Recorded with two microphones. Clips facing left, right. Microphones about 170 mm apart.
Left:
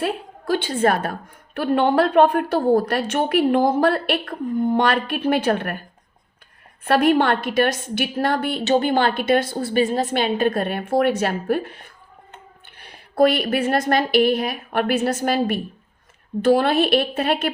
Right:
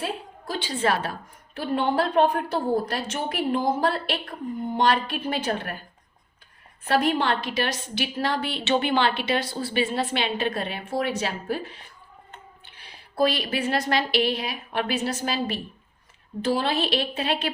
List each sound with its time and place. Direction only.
0.0 s a woman's voice: 65° left (ahead or behind)
6.8 s a woman's voice: 60° left (ahead or behind)